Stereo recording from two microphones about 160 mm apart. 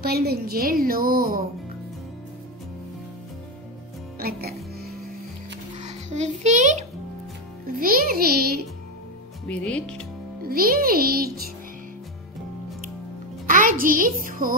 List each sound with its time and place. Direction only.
0.0 s a woman's voice: 75° right (ahead or behind)
4.2 s music: 70° right (ahead or behind)
5.8 s a child's voice: 45° right (ahead or behind)
7.8 s a woman's voice: 65° right (ahead or behind)
9.5 s speech: 10° left (ahead or behind)
10.4 s a woman's voice: 65° right (ahead or behind)
13.5 s a child's voice: 55° right (ahead or behind)